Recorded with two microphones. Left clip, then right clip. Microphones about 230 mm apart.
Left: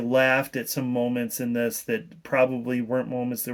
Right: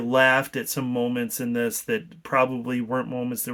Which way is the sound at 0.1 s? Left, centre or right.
Centre.